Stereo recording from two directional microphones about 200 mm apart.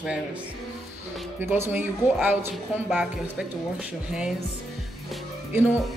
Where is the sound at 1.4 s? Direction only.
10° right (ahead or behind).